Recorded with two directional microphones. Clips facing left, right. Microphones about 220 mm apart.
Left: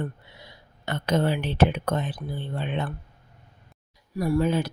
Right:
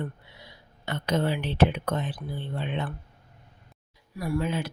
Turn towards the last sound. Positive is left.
turn(degrees=40)  # may be behind; listen again after turning